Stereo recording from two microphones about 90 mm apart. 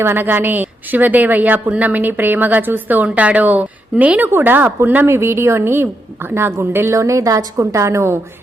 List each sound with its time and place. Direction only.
0.0 s a woman's voice: 25° right (ahead or behind)